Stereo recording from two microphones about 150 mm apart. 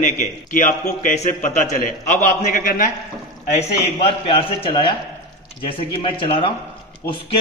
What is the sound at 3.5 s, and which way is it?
A man's voice, 45° left (ahead or behind).